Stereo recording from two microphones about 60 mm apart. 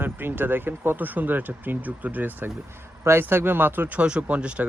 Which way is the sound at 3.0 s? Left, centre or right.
Right.